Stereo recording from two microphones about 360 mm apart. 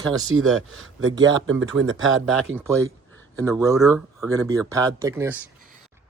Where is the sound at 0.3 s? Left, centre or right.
Right.